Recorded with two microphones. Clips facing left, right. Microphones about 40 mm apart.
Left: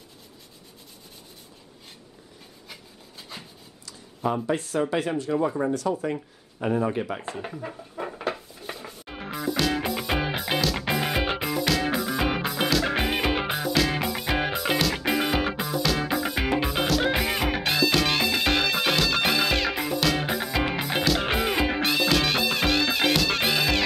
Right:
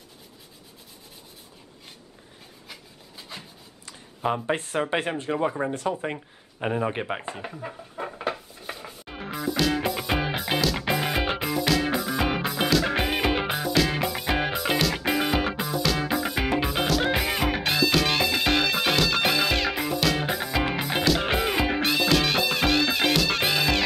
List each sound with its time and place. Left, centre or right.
2.7 s rub: centre
3.8 s a sound: right
4.5 s speech: right
7.4 s music: centre